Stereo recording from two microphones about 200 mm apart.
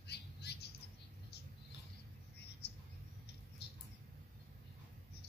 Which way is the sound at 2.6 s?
55° left (ahead or behind).